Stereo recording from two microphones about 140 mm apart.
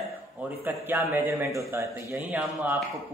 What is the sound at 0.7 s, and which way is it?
A man's voice, 15° right (ahead or behind).